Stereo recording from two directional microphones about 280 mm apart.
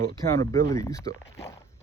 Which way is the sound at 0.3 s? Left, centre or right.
Centre.